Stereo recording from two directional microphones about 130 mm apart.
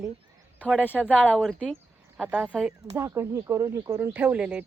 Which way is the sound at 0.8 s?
15° left (ahead or behind).